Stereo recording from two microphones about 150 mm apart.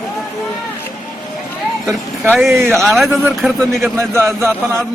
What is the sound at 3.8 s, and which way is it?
A man's voice, 15° right (ahead or behind).